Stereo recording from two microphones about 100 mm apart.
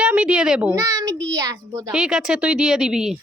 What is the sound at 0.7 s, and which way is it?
A child's voice, 30° right (ahead or behind).